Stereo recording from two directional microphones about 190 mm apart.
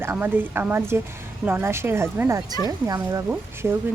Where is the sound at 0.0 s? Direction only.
10° right (ahead or behind).